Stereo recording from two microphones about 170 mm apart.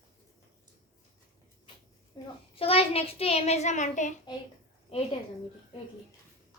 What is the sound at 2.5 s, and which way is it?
A child's voice, 35° left (ahead or behind).